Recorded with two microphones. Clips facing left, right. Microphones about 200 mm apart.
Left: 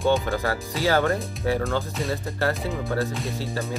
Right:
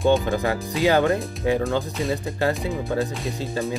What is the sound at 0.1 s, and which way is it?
Speech, 15° right (ahead or behind).